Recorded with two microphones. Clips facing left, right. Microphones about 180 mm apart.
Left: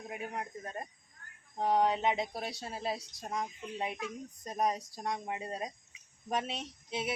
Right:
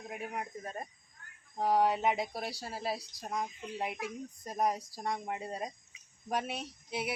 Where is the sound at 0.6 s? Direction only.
5° right (ahead or behind).